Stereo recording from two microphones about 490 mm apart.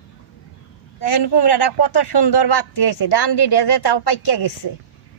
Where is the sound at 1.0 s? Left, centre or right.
Left.